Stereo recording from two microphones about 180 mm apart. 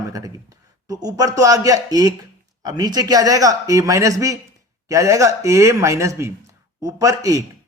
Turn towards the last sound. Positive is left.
turn(degrees=-20)  # may be behind; listen again after turning